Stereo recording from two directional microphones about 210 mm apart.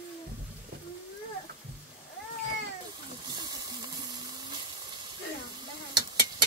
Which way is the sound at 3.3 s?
20° right (ahead or behind).